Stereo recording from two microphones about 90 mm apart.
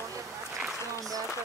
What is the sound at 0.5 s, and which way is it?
Speech, centre (ahead or behind).